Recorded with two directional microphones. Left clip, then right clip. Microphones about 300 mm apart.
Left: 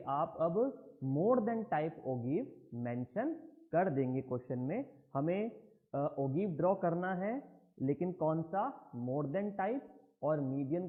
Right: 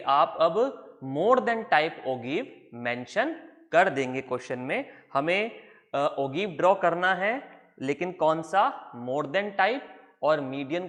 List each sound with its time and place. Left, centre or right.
0.0 s speech: centre